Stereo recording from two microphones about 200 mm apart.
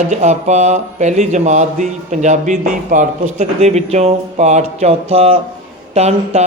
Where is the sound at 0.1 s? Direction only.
35° right (ahead or behind).